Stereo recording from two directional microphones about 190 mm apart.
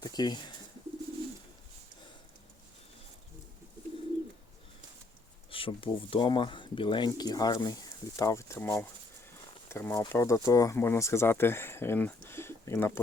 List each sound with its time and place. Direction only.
0.0 s speech: 20° left (ahead or behind)
5.5 s speech: 30° left (ahead or behind); by 13.0 s 15° left (ahead or behind)